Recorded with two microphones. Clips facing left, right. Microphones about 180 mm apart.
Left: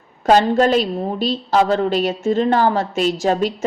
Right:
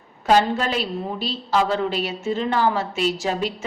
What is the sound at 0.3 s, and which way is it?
A woman's voice, 45° left (ahead or behind).